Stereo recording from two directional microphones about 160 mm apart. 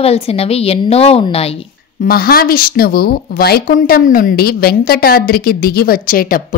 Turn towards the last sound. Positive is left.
turn(degrees=60)  # may be behind; listen again after turning